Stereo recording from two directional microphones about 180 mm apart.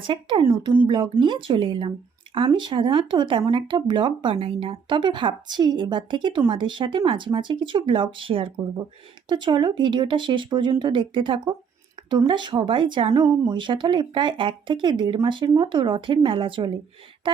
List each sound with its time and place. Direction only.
0.1 s speech: 30° right (ahead or behind)